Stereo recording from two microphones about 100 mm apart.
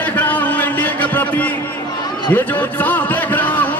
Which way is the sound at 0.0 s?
15° left (ahead or behind).